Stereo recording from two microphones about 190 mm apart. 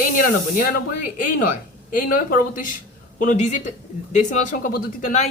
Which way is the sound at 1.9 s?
45° left (ahead or behind).